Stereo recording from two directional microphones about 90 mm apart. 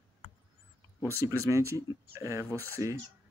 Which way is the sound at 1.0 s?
35° right (ahead or behind).